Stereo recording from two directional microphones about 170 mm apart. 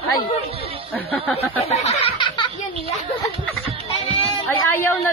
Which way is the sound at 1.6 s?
40° left (ahead or behind).